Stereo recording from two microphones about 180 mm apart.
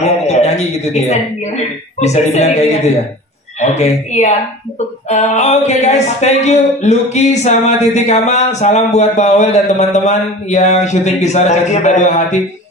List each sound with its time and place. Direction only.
0.0 s a man's voice: 40° left (ahead or behind)